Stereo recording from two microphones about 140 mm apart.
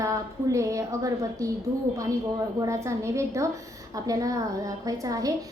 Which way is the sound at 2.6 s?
20° right (ahead or behind).